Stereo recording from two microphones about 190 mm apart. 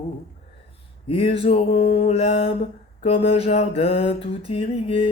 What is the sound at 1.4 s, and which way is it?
Music, 30° left (ahead or behind).